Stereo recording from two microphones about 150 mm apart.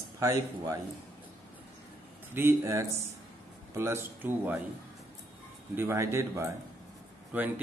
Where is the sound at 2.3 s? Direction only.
15° right (ahead or behind).